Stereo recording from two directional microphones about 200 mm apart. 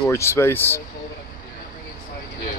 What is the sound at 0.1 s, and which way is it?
Speech, 15° left (ahead or behind).